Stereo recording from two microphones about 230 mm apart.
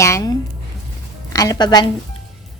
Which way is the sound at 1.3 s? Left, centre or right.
Centre.